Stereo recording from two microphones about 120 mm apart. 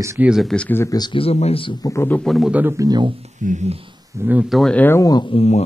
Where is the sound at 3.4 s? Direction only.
80° right.